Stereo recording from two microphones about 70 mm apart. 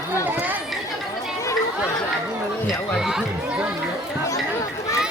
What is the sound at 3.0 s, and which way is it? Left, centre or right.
Chatter, centre.